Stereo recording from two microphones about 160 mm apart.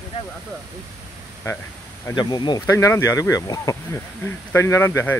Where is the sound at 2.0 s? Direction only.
25° left (ahead or behind).